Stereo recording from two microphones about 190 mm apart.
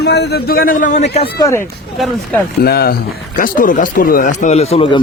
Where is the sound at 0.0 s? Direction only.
60° left (ahead or behind); by 1.0 s 40° left (ahead or behind).